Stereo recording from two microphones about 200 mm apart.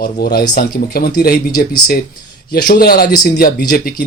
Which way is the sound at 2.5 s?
50° left (ahead or behind).